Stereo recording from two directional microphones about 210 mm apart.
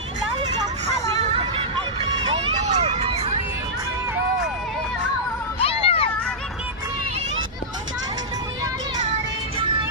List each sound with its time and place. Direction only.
0.4 s vehicle: 30° right (ahead or behind)
2.0 s a sound: 25° right (ahead or behind)
5.5 s music: 25° left (ahead or behind)